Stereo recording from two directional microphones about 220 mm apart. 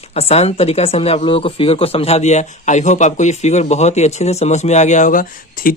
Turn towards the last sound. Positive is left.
turn(degrees=40)  # may be behind; listen again after turning